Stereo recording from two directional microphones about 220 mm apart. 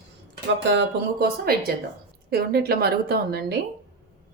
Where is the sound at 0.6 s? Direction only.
50° right (ahead or behind).